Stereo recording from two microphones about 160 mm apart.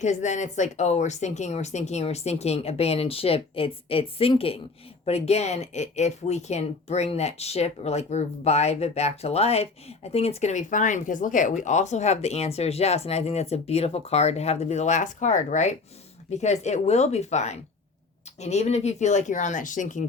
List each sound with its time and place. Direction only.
0.0 s speech: 50° left (ahead or behind)